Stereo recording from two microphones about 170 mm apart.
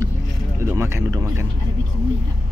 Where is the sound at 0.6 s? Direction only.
15° right (ahead or behind).